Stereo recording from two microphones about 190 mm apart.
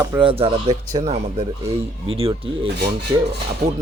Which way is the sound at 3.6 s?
45° right (ahead or behind).